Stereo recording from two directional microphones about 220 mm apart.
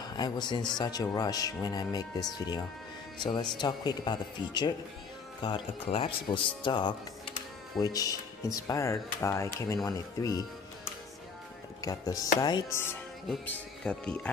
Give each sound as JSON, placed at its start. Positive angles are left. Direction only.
{"t": 0.2, "sound": "speech", "side_deg": 20}
{"t": 11.8, "sound": "speech", "side_deg": 15}